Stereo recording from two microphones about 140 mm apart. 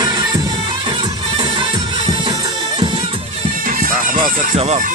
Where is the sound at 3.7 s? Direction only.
85° right.